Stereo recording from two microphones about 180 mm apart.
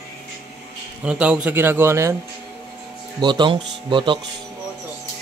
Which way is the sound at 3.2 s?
25° right (ahead or behind).